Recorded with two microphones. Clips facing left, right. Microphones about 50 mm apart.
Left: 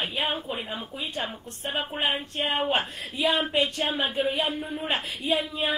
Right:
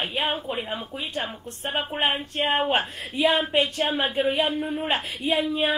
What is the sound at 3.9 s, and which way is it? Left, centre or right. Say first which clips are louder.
Speech: right 3 dB; right.